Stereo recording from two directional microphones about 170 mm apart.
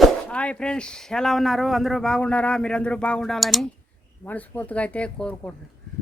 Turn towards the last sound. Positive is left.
turn(degrees=5)  # may be behind; listen again after turning